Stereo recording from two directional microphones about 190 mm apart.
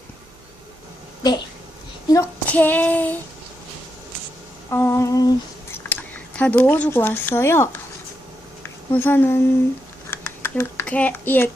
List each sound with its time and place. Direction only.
2.0 s child singing: 15° left (ahead or behind)
4.7 s child singing: 10° left (ahead or behind)
5.7 s speech: 10° left (ahead or behind)
8.9 s child singing: 10° left (ahead or behind)
10.1 s a sound: 10° left (ahead or behind)